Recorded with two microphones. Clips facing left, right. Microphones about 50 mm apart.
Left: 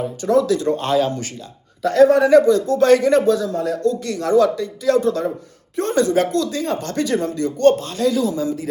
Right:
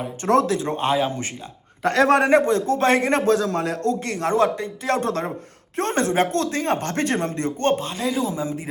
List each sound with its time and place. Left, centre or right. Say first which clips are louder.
0.4 s speech: left 3 dB; right
1.8 s a man's voice: left 4 dB; right
2.3 s speech: left 5 dB; right
4.9 s a man's voice: left 6 dB; right